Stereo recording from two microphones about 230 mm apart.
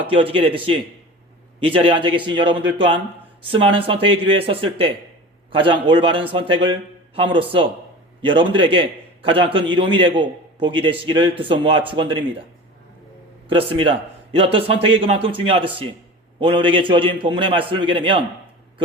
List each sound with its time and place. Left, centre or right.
0.2 s a man's voice: right
13.5 s a man's voice: right